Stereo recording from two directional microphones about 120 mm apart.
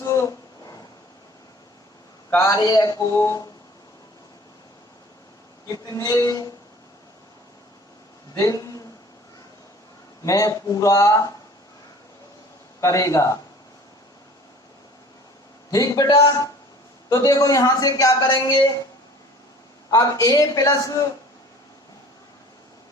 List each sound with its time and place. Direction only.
0.0 s a sound: 25° left (ahead or behind)
2.3 s speech: 25° left (ahead or behind)
5.6 s speech: 30° left (ahead or behind)
8.4 s speech: 30° left (ahead or behind)
10.2 s speech: 30° left (ahead or behind)
12.8 s speech: 25° left (ahead or behind)
15.7 s a man's voice: 30° left (ahead or behind)
18.3 s a man's voice: 40° left (ahead or behind)
19.9 s speech: 25° left (ahead or behind)